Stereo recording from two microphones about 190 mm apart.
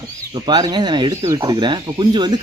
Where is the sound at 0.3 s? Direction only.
20° right (ahead or behind).